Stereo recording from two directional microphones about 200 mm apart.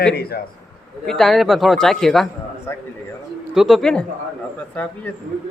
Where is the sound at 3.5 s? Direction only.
Centre (ahead or behind).